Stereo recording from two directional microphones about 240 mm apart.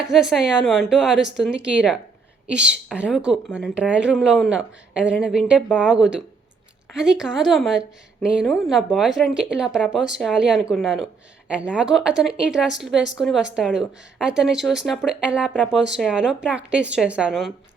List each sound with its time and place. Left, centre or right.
0.1 s speech: centre